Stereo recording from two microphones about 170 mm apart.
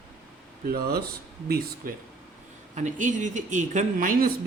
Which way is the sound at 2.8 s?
45° right (ahead or behind).